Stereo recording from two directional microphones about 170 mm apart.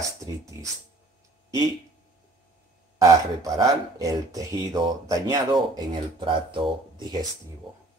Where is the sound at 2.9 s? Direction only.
20° right (ahead or behind).